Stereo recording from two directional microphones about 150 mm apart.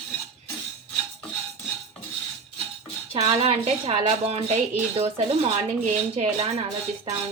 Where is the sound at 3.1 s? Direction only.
45° right (ahead or behind).